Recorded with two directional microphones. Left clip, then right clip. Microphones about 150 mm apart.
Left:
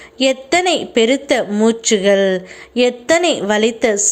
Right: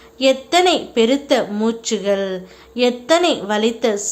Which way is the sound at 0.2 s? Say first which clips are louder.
Even; 25° left (ahead or behind).